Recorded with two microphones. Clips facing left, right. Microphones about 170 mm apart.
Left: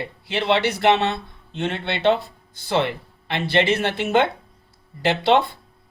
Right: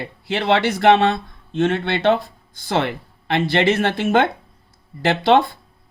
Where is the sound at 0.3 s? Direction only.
50° right (ahead or behind).